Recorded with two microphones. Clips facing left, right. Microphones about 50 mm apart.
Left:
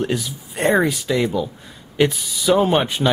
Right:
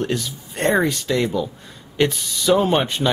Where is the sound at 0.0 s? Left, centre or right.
Centre.